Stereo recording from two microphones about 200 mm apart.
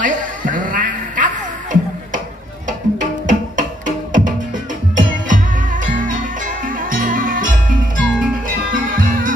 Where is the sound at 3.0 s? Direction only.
40° right (ahead or behind).